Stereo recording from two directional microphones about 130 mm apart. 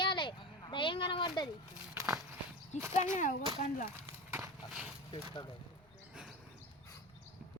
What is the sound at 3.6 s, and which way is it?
Speech, 90° left.